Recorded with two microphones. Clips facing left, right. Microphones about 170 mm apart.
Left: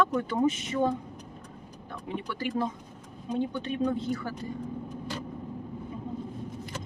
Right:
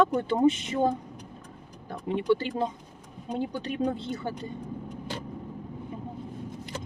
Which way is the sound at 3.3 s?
35° right (ahead or behind).